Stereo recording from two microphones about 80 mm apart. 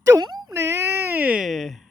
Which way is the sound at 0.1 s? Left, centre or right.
Right.